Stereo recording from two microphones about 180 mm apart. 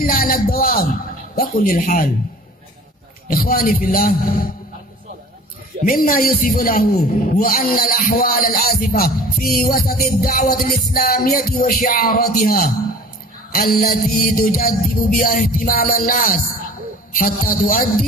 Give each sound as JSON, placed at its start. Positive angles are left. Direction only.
{"t": 0.0, "sound": "a man's voice", "side_deg": 55}
{"t": 3.3, "sound": "a man's voice", "side_deg": 50}
{"t": 5.9, "sound": "a man's voice", "side_deg": 55}